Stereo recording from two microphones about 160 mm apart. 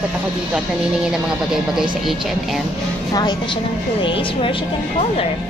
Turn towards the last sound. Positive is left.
turn(degrees=30)  # may be behind; listen again after turning